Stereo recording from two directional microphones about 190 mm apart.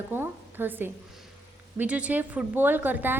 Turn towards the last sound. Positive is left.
turn(degrees=-10)  # may be behind; listen again after turning